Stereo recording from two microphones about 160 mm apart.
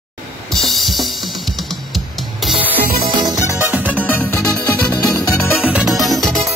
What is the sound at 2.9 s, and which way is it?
Music, 65° right (ahead or behind).